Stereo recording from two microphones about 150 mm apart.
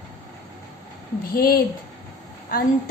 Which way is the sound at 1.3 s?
80° left.